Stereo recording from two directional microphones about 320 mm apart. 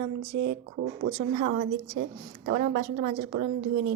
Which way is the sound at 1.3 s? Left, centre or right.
Right.